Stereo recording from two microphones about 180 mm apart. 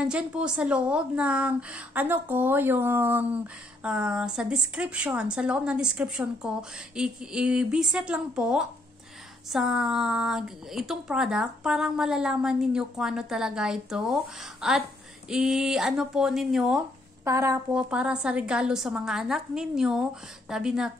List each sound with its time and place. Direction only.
0.0 s a woman's voice: 5° right (ahead or behind)
17.2 s a woman's voice: 15° right (ahead or behind)
17.7 s a woman's voice: 5° right (ahead or behind)